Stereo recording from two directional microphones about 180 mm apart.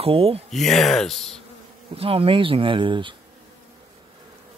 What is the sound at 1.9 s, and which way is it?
Speech, 30° right (ahead or behind).